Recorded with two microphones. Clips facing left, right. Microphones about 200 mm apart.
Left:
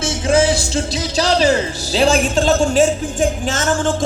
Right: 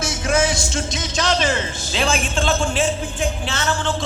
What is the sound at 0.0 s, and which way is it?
A man's voice, 30° left (ahead or behind).